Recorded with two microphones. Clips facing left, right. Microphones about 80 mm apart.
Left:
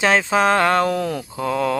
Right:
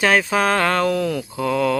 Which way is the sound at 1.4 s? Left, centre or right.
Left.